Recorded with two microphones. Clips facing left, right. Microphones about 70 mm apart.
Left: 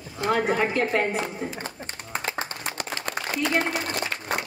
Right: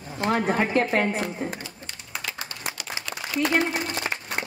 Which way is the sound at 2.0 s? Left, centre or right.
Left.